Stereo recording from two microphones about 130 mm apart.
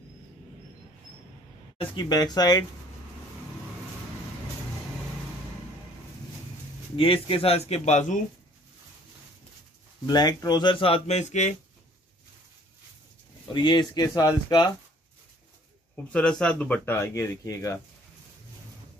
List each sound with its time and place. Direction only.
1.8 s speech: 35° left (ahead or behind)
7.0 s speech: 45° left (ahead or behind)
10.0 s speech: 30° left (ahead or behind); by 11.5 s 65° left (ahead or behind)
13.5 s speech: 35° left (ahead or behind)
16.1 s speech: 5° left (ahead or behind); by 17.7 s 20° left (ahead or behind)